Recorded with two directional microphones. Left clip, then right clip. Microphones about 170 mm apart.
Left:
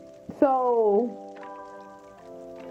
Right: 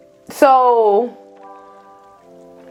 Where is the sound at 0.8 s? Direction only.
45° right (ahead or behind).